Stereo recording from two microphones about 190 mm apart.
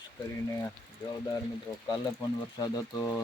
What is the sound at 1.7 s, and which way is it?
Speech, 15° left (ahead or behind).